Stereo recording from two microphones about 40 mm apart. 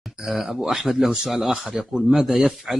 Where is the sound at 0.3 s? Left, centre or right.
Centre.